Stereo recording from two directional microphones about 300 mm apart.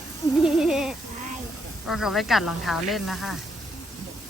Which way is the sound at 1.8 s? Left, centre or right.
Centre.